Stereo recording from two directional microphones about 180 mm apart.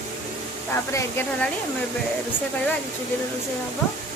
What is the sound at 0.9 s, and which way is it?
Speech, 15° left (ahead or behind).